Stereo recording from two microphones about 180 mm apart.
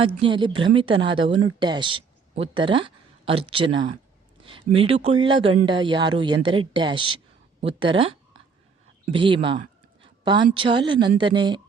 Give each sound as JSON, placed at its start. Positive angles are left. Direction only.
{"t": 0.0, "sound": "a woman's voice", "side_deg": -30}
{"t": 9.1, "sound": "a woman's voice", "side_deg": -30}